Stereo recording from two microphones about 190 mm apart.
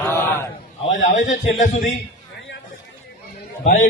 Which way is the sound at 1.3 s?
40° left (ahead or behind).